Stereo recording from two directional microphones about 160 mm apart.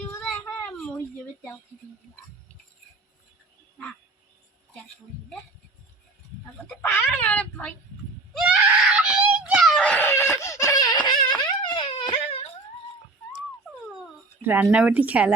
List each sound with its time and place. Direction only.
0.1 s child singing: 10° left (ahead or behind)
7.0 s speech: 5° left (ahead or behind)
8.4 s screaming: 5° right (ahead or behind)
9.8 s a sound: 10° left (ahead or behind); by 12.5 s 40° left (ahead or behind)
14.4 s speech: 10° right (ahead or behind)